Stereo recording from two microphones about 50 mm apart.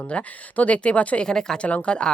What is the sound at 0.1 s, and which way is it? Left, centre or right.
Speech, left.